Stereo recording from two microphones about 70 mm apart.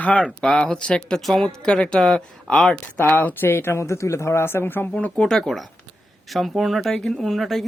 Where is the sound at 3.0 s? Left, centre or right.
Left.